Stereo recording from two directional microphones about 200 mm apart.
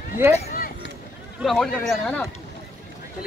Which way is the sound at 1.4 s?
Centre (ahead or behind).